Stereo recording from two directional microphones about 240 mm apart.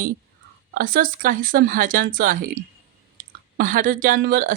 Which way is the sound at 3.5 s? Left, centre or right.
Right.